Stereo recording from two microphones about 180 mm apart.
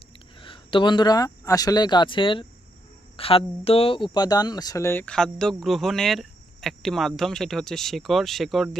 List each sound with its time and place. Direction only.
0.3 s speech: 30° left (ahead or behind); by 8.8 s centre (ahead or behind)